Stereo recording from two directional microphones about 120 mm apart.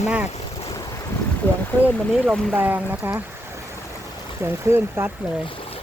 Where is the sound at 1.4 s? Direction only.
15° left (ahead or behind).